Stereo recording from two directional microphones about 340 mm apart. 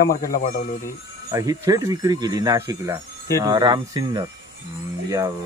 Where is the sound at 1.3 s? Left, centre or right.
Centre.